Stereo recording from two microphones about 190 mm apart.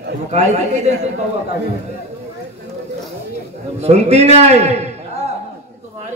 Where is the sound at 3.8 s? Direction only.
35° right (ahead or behind).